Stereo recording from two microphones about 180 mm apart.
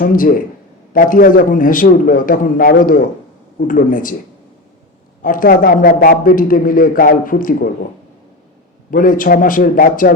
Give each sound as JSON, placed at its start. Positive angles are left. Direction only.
{"t": 0.0, "sound": "a man's voice", "side_deg": 50}
{"t": 5.2, "sound": "a man's voice", "side_deg": 50}
{"t": 8.9, "sound": "a man's voice", "side_deg": 50}